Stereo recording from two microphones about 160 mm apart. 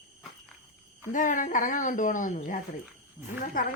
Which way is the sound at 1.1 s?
55° left (ahead or behind).